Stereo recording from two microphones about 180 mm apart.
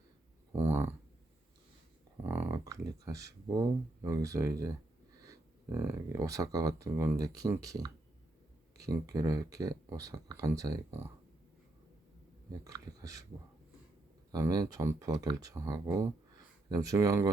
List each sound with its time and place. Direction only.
0.5 s a sound: 15° right (ahead or behind)
2.2 s speech: 15° right (ahead or behind)
12.5 s speech: 20° right (ahead or behind)
14.3 s speech: 20° right (ahead or behind)